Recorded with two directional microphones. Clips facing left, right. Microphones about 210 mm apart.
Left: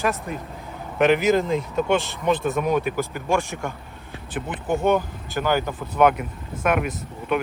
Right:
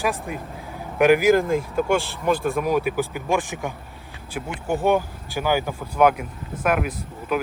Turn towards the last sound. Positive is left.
turn(degrees=-5)  # may be behind; listen again after turning